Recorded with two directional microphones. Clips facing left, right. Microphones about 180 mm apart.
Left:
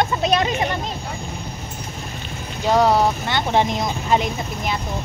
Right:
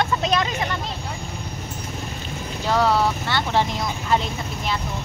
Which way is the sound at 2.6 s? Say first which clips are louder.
Left 4 dB; 15° left (ahead or behind).